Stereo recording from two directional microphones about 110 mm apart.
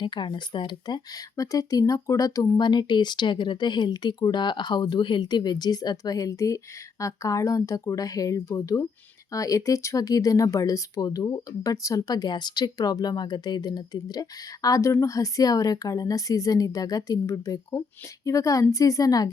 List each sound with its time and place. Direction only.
0.0 s speech: 45° left (ahead or behind)